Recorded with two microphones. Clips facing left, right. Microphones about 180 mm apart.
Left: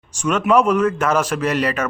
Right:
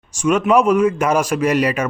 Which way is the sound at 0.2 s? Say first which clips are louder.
Right 2 dB; 10° right (ahead or behind).